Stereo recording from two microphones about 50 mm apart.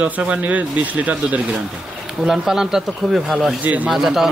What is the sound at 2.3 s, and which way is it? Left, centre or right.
Speech, centre.